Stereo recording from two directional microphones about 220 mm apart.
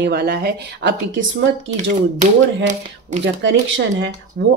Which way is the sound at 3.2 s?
60° right (ahead or behind).